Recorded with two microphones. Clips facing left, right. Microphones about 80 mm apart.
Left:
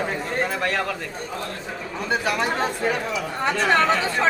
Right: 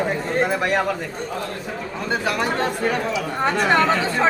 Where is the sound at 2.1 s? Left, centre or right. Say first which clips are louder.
Right 1 dB; centre.